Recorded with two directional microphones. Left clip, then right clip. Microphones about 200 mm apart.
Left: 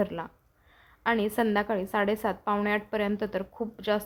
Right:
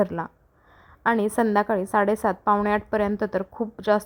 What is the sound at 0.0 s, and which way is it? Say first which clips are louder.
A woman's voice: right 6 dB; 40° right (ahead or behind).